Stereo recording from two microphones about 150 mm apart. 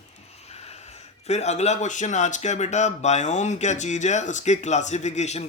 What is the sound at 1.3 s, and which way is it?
Speech, 50° left (ahead or behind).